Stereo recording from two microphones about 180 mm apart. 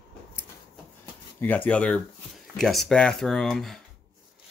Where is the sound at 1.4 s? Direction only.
10° left (ahead or behind).